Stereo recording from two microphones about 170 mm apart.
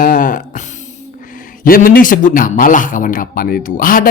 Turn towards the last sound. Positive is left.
turn(degrees=55)  # may be behind; listen again after turning